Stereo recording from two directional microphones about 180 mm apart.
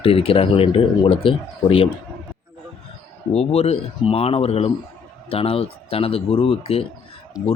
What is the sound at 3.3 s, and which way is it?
Speech, 35° left (ahead or behind).